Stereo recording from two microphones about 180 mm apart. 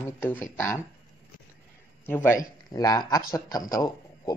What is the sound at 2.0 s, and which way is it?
A man's voice, 10° left (ahead or behind).